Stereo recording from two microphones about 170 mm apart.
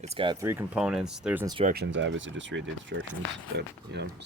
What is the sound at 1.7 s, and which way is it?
Speech, 80° right.